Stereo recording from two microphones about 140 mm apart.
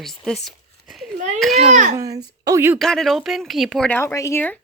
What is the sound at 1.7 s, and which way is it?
Speech, 60° right (ahead or behind).